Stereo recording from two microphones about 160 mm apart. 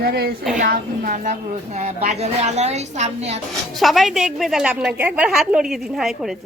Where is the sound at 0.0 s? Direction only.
80° right.